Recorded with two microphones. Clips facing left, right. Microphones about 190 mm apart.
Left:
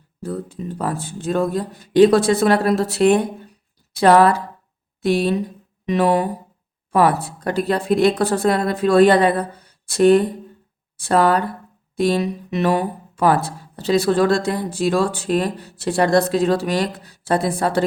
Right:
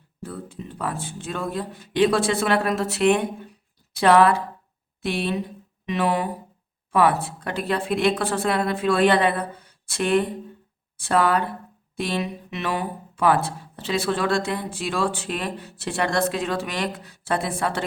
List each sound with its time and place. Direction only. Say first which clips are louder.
0.2 s speech: left 7 dB; 40° left (ahead or behind)
5.8 s a sound: left 6 dB; 40° left (ahead or behind)
6.9 s speech: left 3 dB; 40° left (ahead or behind)